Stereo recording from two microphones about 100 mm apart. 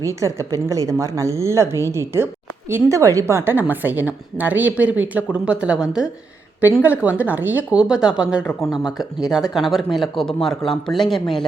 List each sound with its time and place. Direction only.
0.0 s a woman's voice: 30° right (ahead or behind); by 11.4 s 5° left (ahead or behind)